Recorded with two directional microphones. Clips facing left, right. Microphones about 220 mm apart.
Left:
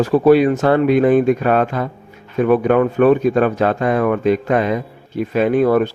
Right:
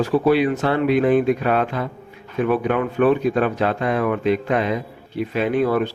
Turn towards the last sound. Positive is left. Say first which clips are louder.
# left 5 dB
turn(degrees=45)  # may be behind; listen again after turning